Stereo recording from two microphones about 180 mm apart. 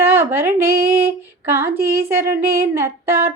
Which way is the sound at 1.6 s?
60° right (ahead or behind).